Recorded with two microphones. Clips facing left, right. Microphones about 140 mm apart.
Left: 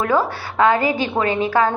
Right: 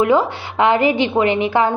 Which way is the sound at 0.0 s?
20° right (ahead or behind).